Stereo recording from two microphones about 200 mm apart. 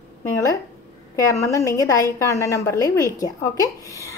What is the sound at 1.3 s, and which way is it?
A woman's voice, 15° left (ahead or behind).